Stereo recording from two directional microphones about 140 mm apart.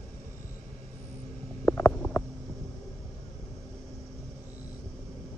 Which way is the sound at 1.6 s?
15° left (ahead or behind).